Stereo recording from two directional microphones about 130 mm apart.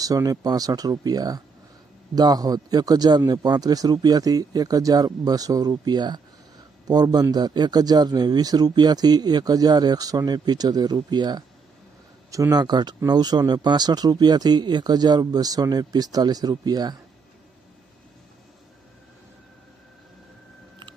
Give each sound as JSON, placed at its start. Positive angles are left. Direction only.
{"t": 0.0, "sound": "a man's voice", "side_deg": -25}